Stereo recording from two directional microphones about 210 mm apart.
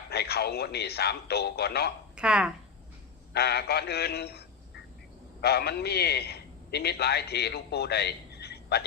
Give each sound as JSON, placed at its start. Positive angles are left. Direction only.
{"t": 0.1, "sound": "speech", "side_deg": 50}
{"t": 2.1, "sound": "speech", "side_deg": -5}
{"t": 3.3, "sound": "a man's voice", "side_deg": 50}